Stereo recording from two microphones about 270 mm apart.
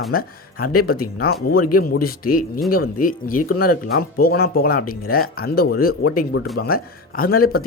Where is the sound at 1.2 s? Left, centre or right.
Left.